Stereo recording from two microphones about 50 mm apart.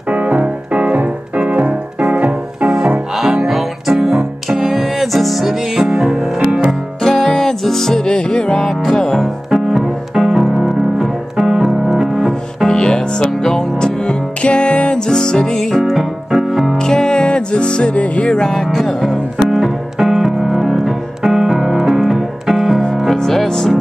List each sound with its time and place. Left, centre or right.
0.1 s music: right
3.4 s music: centre
7.0 s music: centre
12.6 s music: centre
15.8 s piano: centre
16.4 s music: centre
16.7 s music: centre
18.3 s music: centre
19.3 s piano: centre
23.0 s music: centre